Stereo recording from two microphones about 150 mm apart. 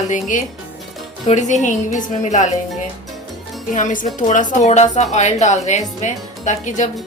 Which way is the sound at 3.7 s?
60° left (ahead or behind).